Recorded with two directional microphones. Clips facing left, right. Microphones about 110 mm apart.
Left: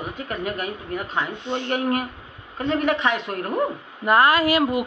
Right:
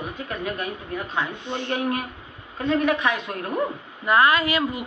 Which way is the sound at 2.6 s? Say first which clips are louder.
Even; 30° left (ahead or behind).